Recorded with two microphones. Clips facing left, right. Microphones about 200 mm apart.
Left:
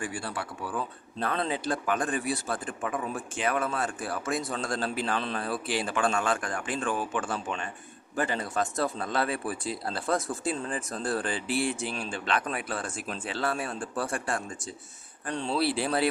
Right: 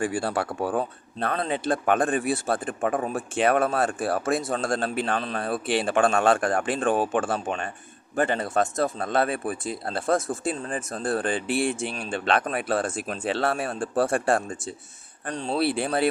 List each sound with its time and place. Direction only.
0.2 s speech: 75° right (ahead or behind)
0.6 s a man's voice: 55° right (ahead or behind)
15.4 s speech: 55° right (ahead or behind)